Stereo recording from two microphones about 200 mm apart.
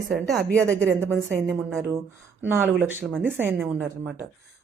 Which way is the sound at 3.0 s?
5° left (ahead or behind).